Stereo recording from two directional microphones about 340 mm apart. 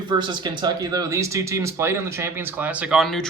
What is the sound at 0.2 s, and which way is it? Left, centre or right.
Speech, centre.